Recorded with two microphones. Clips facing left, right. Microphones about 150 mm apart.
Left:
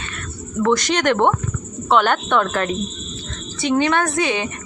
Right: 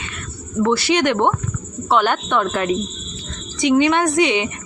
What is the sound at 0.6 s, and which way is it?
A woman's voice, 10° right (ahead or behind).